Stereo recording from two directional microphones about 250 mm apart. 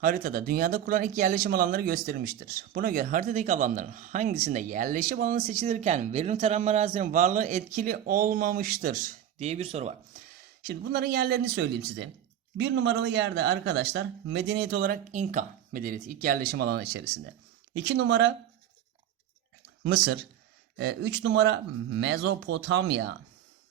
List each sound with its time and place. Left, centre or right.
0.0 s speech: right
10.6 s speech: right
20.7 s speech: right